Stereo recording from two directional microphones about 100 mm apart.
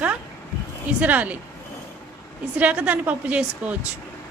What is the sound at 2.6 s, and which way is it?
A woman's voice, 15° right (ahead or behind).